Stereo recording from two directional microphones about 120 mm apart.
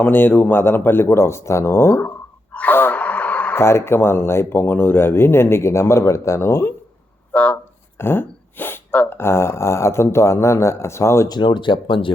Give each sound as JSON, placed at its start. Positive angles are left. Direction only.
{"t": 0.0, "sound": "speech", "side_deg": 15}
{"t": 11.3, "sound": "speech", "side_deg": 40}